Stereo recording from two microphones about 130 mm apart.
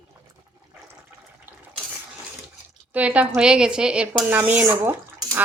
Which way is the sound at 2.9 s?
10° right (ahead or behind).